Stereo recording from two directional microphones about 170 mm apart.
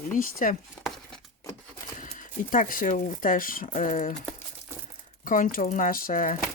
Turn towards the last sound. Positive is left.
turn(degrees=50)  # may be behind; listen again after turning